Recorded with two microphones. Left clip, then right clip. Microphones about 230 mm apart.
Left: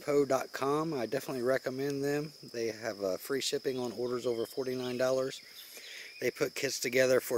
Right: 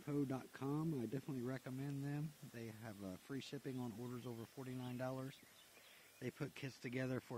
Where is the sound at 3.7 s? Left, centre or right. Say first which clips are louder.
Left 16 dB; right.